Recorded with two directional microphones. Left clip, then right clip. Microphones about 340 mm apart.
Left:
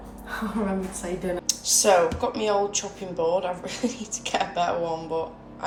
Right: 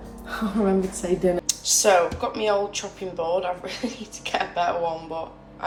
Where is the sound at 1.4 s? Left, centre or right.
Centre.